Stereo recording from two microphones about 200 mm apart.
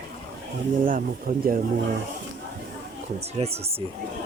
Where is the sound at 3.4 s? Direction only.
30° right (ahead or behind).